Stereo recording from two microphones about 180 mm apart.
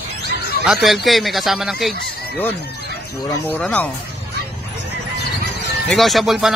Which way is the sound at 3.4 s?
10° left (ahead or behind).